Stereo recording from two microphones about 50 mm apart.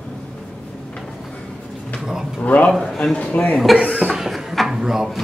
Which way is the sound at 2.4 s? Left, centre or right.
Left.